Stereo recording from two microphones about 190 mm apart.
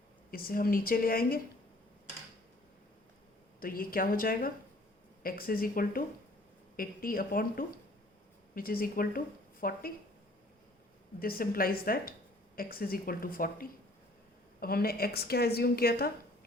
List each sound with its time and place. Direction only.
0.3 s a woman's voice: 50° left (ahead or behind)
3.6 s a woman's voice: 50° left (ahead or behind)
11.2 s a woman's voice: 50° left (ahead or behind)